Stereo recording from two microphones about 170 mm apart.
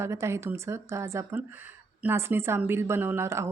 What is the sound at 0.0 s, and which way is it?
A woman's voice, 15° right (ahead or behind).